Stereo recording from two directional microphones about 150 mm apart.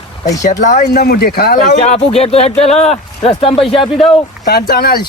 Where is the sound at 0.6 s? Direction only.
60° left (ahead or behind); by 1.7 s 90° left.